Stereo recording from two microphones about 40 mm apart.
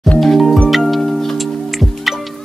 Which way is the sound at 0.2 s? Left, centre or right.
Centre.